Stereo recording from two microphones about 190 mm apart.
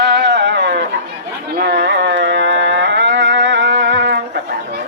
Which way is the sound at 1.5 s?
60° right (ahead or behind).